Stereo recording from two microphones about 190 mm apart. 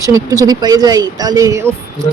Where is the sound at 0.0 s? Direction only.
15° right (ahead or behind).